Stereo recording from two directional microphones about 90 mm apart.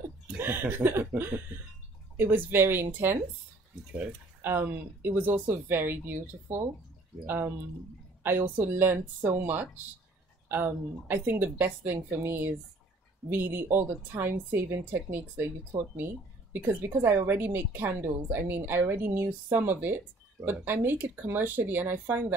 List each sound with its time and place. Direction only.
0.4 s a woman's voice: 25° right (ahead or behind)
4.4 s a woman's voice: 25° right (ahead or behind)
15.7 s speech: 50° right (ahead or behind)
16.5 s a woman's voice: 20° right (ahead or behind)